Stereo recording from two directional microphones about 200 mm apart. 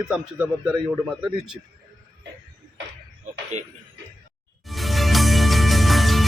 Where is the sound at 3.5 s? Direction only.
35° right (ahead or behind).